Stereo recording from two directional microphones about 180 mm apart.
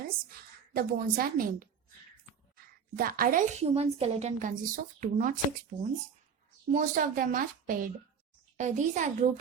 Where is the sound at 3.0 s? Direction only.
55° right (ahead or behind).